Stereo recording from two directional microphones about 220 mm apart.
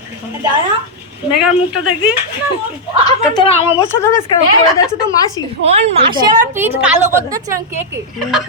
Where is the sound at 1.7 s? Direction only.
80° left.